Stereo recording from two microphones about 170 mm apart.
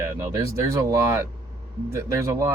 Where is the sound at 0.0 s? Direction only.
20° right (ahead or behind).